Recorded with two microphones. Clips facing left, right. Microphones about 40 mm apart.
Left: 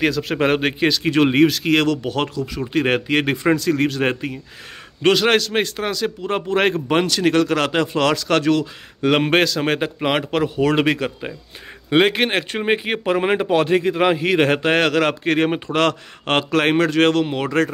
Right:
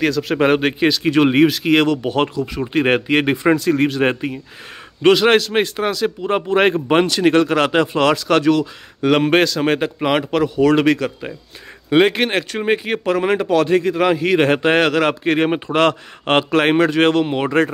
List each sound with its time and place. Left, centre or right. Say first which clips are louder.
0.0 s speech: right 2 dB; centre
14.2 s speech: right 2 dB; centre